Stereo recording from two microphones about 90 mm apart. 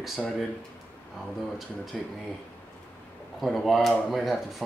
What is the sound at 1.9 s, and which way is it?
Speech, 5° right (ahead or behind).